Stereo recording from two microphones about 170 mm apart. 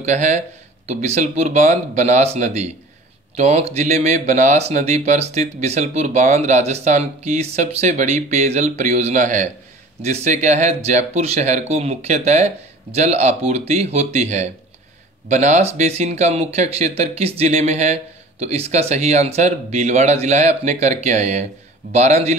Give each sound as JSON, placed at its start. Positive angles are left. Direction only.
{"t": 0.0, "sound": "speech", "side_deg": -45}